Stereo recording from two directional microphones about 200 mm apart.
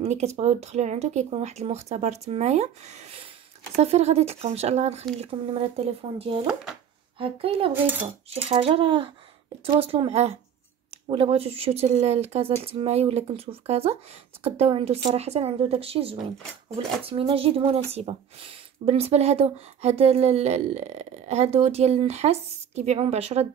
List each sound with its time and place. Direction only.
0.0 s speech: 35° right (ahead or behind)
7.7 s cutlery: 10° right (ahead or behind)
8.3 s speech: 30° right (ahead or behind)